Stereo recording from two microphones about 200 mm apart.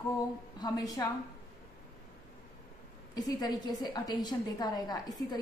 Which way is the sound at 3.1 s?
20° left (ahead or behind).